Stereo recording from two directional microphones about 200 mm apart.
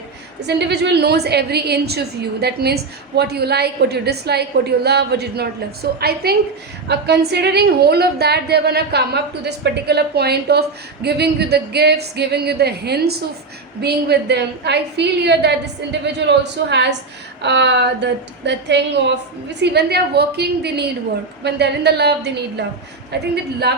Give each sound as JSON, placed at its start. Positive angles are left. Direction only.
{"t": 0.4, "sound": "a woman's voice", "side_deg": -60}